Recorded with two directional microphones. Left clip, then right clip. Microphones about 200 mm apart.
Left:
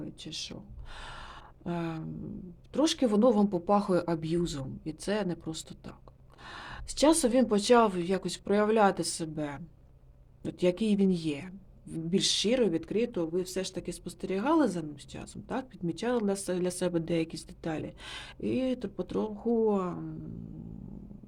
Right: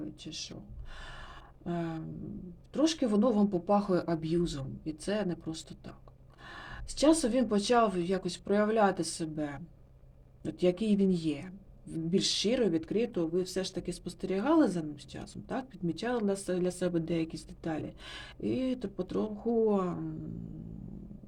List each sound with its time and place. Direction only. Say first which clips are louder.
0.0 s speech: left 2 dB; 20° left (ahead or behind)
0.9 s gasp: left 3 dB; 20° left (ahead or behind)
2.7 s a woman's voice: left 2 dB; 25° left (ahead or behind); by 20.1 s 5° left (ahead or behind)